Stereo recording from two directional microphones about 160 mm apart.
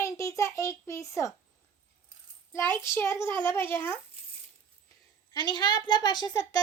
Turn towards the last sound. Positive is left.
turn(degrees=25)  # may be behind; listen again after turning